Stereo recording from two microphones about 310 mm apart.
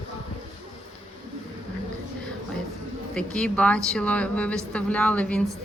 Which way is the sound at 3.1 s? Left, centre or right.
Centre.